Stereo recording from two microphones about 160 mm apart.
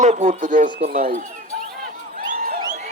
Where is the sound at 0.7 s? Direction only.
65° right (ahead or behind).